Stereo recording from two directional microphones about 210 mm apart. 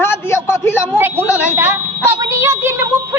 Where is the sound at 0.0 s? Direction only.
10° left (ahead or behind).